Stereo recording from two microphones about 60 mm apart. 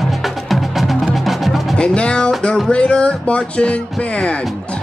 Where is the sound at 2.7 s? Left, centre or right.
Centre.